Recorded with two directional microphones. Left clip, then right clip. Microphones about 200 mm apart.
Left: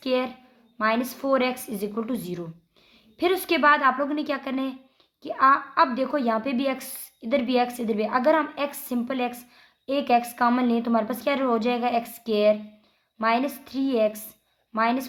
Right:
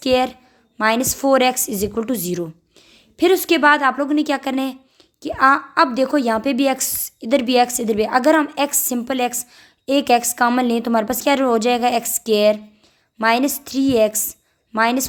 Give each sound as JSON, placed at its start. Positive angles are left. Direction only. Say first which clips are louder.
{"t": 0.0, "sound": "a woman's voice", "louder": "right 8 dB", "side_deg": -45}